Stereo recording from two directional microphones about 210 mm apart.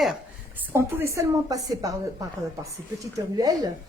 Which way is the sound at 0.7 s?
10° right (ahead or behind).